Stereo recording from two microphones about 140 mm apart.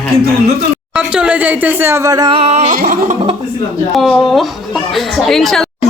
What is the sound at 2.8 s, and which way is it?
Speech, 65° right (ahead or behind).